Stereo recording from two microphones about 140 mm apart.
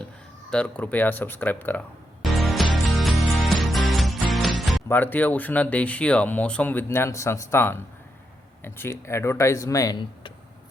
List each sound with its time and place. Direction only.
0.5 s speech: 10° left (ahead or behind)
2.2 s music: centre (ahead or behind)
4.9 s speech: 15° left (ahead or behind)